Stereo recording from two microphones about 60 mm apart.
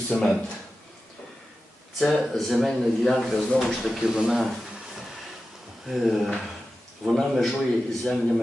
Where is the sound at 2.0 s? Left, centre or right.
Centre.